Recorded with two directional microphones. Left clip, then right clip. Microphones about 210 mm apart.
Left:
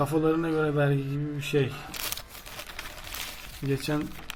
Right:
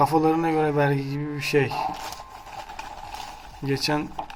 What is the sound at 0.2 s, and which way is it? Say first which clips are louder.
Speech: right 4 dB; 15° left (ahead or behind).